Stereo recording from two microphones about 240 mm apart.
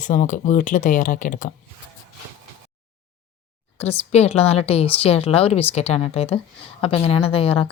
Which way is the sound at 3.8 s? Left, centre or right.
Left.